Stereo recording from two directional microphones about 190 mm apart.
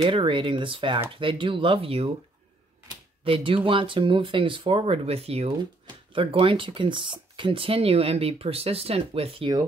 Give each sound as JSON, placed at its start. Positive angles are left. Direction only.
{"t": 0.0, "sound": "speech", "side_deg": -25}
{"t": 3.3, "sound": "speech", "side_deg": -30}